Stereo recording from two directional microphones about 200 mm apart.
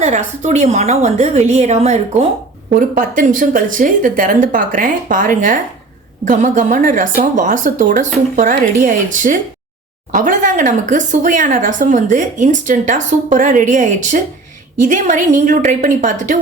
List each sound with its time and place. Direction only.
0.0 s speech: 35° right (ahead or behind)
2.7 s speech: 45° right (ahead or behind)